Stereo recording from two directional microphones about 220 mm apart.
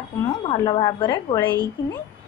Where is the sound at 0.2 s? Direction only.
15° left (ahead or behind).